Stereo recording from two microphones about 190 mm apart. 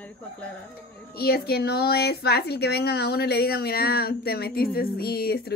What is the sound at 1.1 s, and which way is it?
A woman's voice, 55° left (ahead or behind).